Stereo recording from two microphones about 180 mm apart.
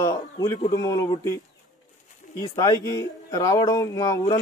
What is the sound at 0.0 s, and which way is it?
Speech, 20° left (ahead or behind).